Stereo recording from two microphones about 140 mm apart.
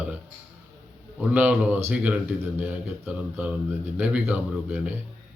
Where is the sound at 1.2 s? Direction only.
10° right (ahead or behind).